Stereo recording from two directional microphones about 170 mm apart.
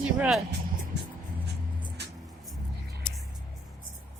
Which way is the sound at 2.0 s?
80° right.